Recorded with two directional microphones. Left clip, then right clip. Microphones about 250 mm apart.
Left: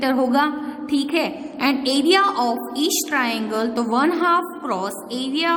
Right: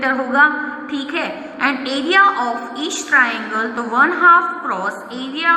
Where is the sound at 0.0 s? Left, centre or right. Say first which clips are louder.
Right 5 dB; left.